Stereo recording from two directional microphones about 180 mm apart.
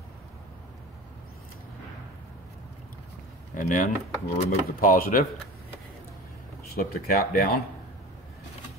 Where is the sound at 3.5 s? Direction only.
50° left (ahead or behind).